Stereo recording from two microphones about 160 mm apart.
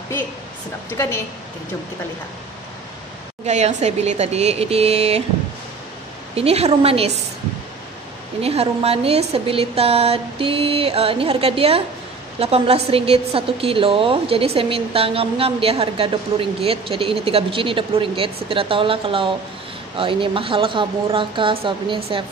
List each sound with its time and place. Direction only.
3.4 s a woman's voice: 45° right (ahead or behind)
6.3 s a woman's voice: 40° right (ahead or behind)
8.4 s a woman's voice: 40° right (ahead or behind)